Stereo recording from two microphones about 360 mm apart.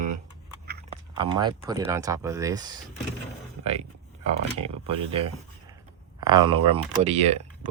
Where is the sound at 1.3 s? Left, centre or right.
Centre.